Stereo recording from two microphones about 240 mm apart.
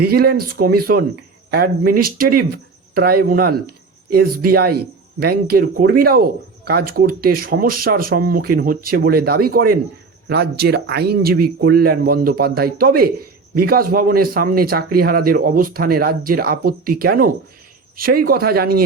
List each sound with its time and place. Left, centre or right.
0.0 s speech: right